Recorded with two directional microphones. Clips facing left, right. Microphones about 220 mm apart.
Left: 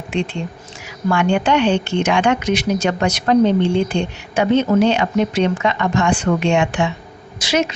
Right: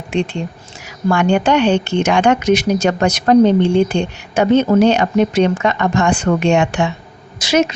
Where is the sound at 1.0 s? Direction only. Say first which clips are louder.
Right 3 dB; 40° right (ahead or behind).